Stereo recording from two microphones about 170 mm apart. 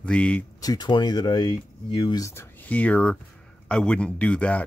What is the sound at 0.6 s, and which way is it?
Speech, 25° left (ahead or behind).